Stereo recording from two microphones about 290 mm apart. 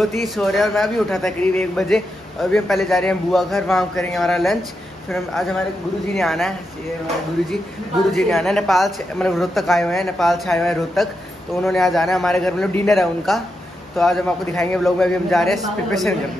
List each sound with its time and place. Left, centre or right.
0.2 s speech: centre
8.1 s speech: centre